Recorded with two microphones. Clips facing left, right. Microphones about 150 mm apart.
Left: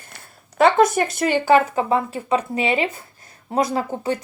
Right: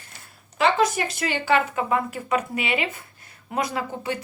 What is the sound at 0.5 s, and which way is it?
Speech, 50° left (ahead or behind).